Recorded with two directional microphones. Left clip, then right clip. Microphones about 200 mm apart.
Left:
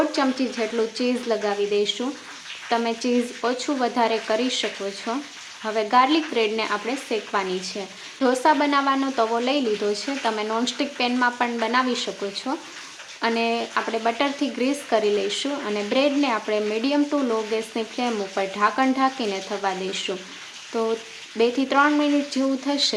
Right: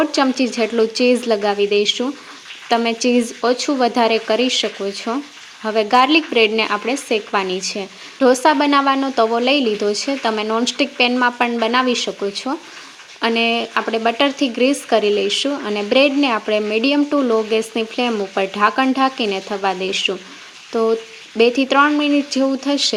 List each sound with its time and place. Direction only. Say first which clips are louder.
0.1 s speech: right 6 dB; 35° right (ahead or behind)